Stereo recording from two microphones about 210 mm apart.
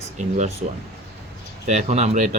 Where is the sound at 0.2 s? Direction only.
35° right (ahead or behind).